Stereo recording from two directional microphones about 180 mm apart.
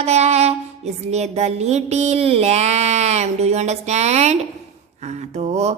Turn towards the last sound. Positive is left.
turn(degrees=-40)  # may be behind; listen again after turning